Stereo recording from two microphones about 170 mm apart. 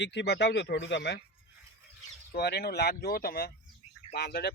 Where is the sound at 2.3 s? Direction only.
70° left (ahead or behind).